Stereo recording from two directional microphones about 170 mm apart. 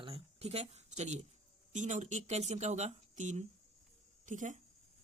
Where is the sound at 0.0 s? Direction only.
35° right (ahead or behind).